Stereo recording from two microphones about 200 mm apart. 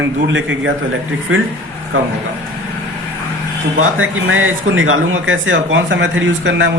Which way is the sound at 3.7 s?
90° right.